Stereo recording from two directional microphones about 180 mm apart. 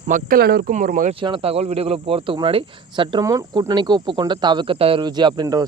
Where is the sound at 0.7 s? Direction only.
45° right (ahead or behind).